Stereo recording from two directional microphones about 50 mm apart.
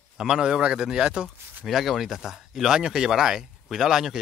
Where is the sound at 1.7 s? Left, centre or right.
Centre.